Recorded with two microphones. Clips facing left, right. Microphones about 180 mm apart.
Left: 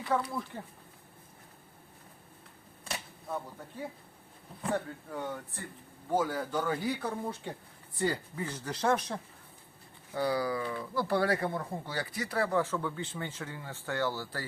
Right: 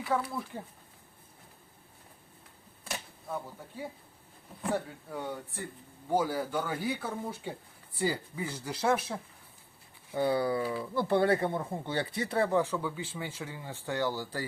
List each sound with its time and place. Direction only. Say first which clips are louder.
0.0 s speech: even; 5° right (ahead or behind)
4.6 s speech: even; 10° right (ahead or behind)
10.1 s speech: right 2 dB; 25° right (ahead or behind)